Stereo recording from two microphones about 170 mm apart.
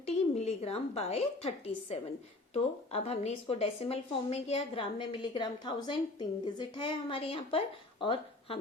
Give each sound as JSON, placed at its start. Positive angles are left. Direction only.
{"t": 0.0, "sound": "a woman's voice", "side_deg": 40}